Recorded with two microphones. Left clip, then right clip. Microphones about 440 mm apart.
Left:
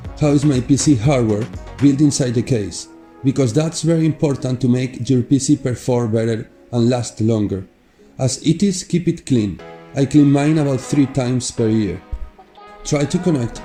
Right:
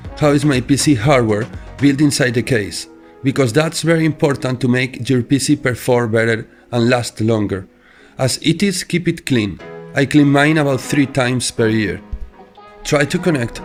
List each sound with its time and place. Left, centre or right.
0.2 s speech: centre